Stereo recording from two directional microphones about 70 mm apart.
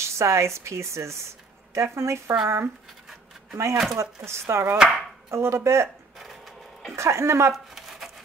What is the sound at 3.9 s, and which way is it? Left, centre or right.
Speech, right.